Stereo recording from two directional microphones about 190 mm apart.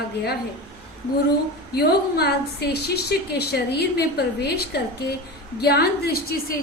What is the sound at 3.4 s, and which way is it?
A woman's voice, 55° left (ahead or behind).